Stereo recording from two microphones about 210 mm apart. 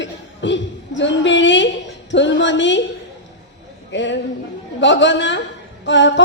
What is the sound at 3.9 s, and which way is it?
A woman's voice, 60° left (ahead or behind).